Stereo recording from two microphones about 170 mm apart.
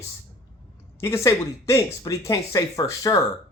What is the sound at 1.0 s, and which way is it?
Speech, 15° left (ahead or behind).